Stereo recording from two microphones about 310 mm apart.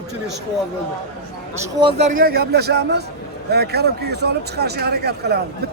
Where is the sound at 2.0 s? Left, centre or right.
Right.